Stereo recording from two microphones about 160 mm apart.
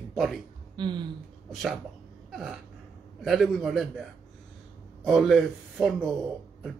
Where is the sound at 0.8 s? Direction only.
30° right (ahead or behind).